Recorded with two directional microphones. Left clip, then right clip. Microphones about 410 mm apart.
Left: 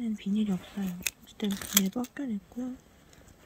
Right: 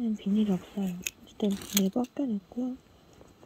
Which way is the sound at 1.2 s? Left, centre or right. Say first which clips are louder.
Right 4 dB; centre.